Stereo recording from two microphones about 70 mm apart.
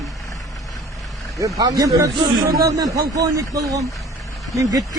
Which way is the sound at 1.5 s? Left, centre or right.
Right.